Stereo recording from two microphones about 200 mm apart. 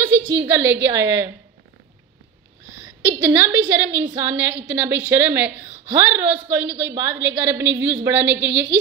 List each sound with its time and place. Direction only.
0.3 s a woman's voice: 10° right (ahead or behind)
2.8 s a woman's voice: 10° right (ahead or behind)